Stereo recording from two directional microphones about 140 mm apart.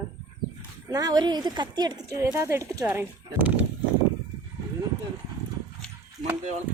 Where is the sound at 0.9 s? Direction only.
25° right (ahead or behind).